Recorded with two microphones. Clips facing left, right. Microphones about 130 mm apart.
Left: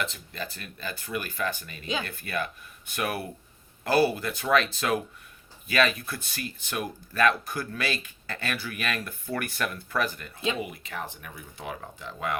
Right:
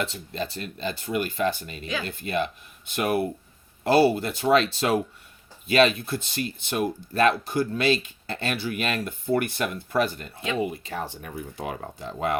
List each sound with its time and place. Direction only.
0.0 s speech: 30° right (ahead or behind)